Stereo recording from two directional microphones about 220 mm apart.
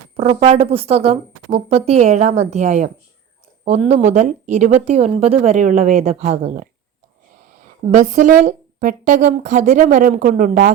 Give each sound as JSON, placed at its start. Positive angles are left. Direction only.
{"t": 0.4, "sound": "a woman's voice", "side_deg": -25}